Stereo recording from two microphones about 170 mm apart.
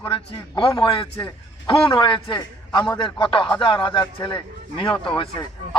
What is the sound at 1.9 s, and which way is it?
A man's voice, 30° left (ahead or behind).